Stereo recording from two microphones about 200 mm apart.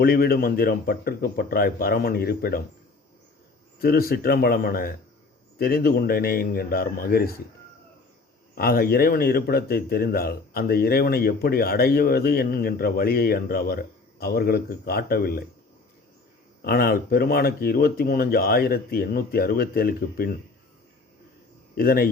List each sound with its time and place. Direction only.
0.0 s speech: 50° left (ahead or behind)
3.8 s speech: 50° left (ahead or behind)
8.5 s speech: 50° left (ahead or behind)
16.6 s speech: 50° left (ahead or behind)
21.8 s speech: 45° left (ahead or behind)